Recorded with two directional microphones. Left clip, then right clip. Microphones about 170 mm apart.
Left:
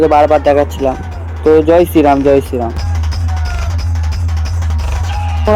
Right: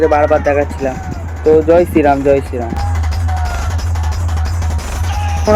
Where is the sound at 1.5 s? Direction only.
25° left (ahead or behind).